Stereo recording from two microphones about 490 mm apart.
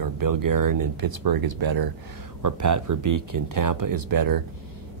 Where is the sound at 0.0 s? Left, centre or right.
Right.